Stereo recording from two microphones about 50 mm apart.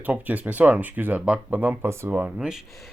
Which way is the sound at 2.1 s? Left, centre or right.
Right.